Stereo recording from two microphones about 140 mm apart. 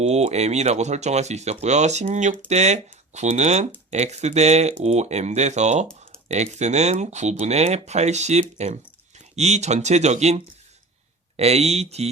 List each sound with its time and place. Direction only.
0.0 s speech: 50° right (ahead or behind)